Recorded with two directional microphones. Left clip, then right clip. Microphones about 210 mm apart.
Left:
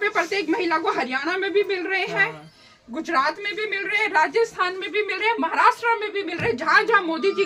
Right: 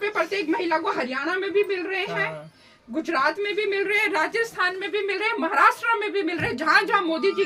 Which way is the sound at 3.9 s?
50° right (ahead or behind).